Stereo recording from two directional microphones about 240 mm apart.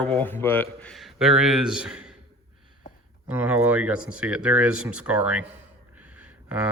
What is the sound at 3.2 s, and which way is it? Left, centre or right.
Speech, centre.